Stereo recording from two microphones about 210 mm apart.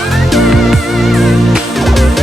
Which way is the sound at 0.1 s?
Centre (ahead or behind).